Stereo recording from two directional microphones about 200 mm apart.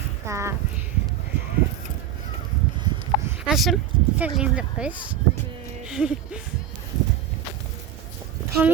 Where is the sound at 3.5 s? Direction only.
Centre (ahead or behind).